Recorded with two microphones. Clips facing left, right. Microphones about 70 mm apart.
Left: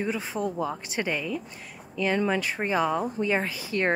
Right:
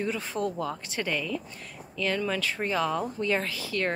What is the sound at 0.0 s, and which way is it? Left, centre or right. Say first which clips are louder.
Speech: left 1 dB; centre.